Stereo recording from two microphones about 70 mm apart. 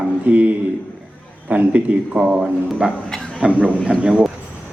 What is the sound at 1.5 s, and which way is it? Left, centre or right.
A man's voice, centre.